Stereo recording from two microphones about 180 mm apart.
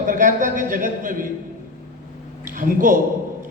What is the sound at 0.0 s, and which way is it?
A man's voice, 45° right (ahead or behind).